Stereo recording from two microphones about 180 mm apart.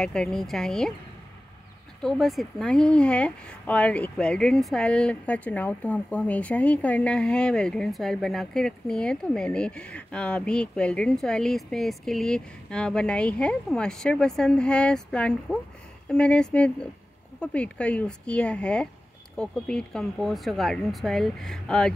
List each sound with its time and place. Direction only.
0.0 s speech: 5° left (ahead or behind)
2.0 s speech: centre (ahead or behind)